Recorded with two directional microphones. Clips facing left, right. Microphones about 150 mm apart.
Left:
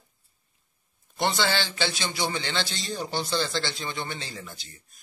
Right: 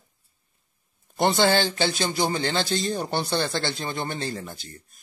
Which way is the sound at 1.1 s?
50° right (ahead or behind).